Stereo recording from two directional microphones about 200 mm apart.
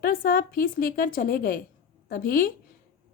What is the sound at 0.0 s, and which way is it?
A woman's voice, 45° left (ahead or behind).